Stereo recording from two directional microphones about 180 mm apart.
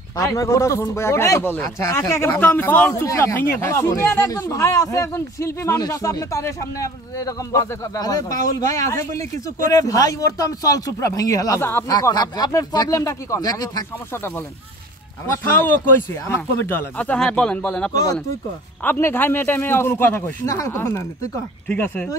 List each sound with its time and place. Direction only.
0.2 s a man's voice: 20° left (ahead or behind)
16.1 s speech: 15° left (ahead or behind)